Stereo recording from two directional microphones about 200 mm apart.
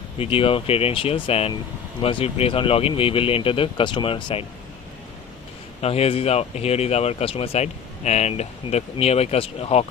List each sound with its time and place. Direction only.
0.2 s speech: 30° left (ahead or behind)
5.8 s speech: 30° left (ahead or behind)